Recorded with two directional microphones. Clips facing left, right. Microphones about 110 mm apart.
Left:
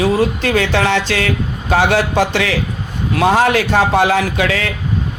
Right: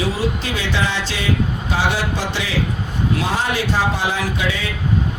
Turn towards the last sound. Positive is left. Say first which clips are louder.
# left 5 dB
turn(degrees=75)  # may be behind; listen again after turning